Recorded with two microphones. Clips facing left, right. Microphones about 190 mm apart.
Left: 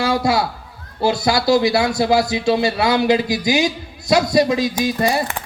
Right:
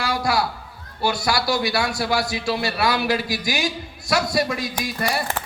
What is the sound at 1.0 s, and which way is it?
A man's voice, 20° left (ahead or behind).